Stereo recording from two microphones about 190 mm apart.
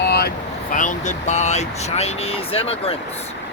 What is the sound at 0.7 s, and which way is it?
Speech, 40° left (ahead or behind).